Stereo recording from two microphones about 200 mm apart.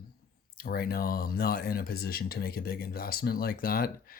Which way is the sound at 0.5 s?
50° left (ahead or behind).